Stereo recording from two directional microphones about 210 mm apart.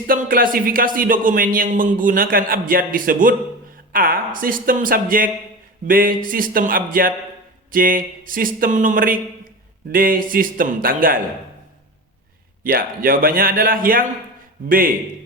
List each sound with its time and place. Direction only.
0.1 s a man's voice: 45° right (ahead or behind)
12.6 s a man's voice: 45° right (ahead or behind)